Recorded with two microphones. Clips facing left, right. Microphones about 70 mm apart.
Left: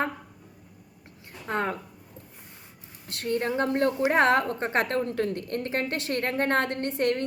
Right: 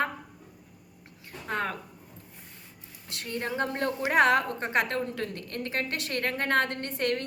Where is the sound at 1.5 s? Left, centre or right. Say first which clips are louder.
Left 3 dB; left.